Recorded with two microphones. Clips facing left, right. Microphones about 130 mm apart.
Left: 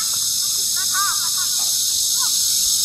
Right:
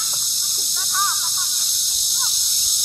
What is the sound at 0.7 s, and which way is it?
Snake, 5° right (ahead or behind).